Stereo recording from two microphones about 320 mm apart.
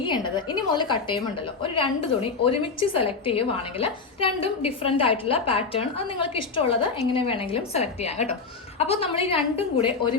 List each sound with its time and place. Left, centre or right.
0.0 s a woman's voice: centre